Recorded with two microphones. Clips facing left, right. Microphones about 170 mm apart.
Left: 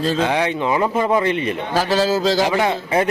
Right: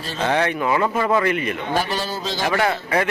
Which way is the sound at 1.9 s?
90° left.